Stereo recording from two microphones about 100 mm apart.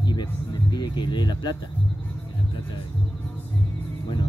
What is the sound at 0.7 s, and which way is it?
Speech, 45° left (ahead or behind).